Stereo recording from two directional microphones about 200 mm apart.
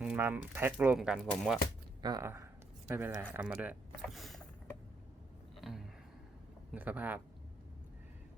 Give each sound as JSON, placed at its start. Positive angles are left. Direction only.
{"t": 0.0, "sound": "speech", "side_deg": -10}
{"t": 2.0, "sound": "speech", "side_deg": -20}
{"t": 5.5, "sound": "a sound", "side_deg": 0}
{"t": 6.7, "sound": "speech", "side_deg": -10}